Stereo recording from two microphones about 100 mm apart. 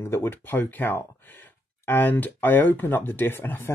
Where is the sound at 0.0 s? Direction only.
20° left (ahead or behind).